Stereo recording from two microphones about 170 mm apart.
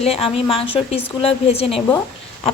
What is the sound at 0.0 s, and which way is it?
A woman's voice, 35° left (ahead or behind).